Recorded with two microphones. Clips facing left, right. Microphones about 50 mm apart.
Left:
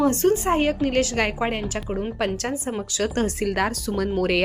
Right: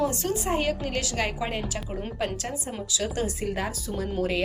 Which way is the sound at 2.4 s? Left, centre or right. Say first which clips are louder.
Left 6 dB; left.